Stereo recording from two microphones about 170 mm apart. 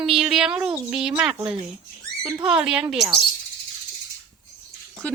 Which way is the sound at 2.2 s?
25° right (ahead or behind).